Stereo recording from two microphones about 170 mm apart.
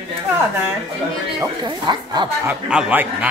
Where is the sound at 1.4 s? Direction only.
25° right (ahead or behind).